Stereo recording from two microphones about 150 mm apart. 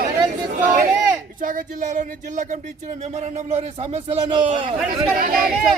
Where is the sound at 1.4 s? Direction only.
60° right (ahead or behind); by 4.7 s 40° right (ahead or behind).